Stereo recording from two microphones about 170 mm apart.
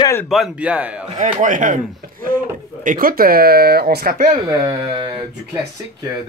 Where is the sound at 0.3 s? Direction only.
Centre (ahead or behind).